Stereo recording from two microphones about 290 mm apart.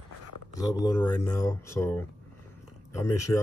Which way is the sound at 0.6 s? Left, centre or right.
Centre.